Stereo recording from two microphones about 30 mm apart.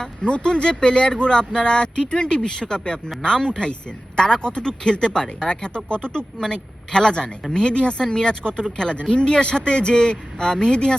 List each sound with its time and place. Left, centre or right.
0.2 s speech: left
2.3 s speech: left